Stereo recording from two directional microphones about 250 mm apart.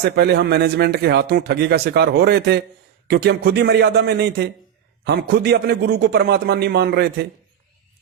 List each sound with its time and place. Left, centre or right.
0.0 s a man's voice: right